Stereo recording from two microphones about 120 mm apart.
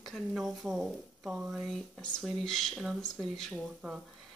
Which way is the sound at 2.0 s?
5° left (ahead or behind).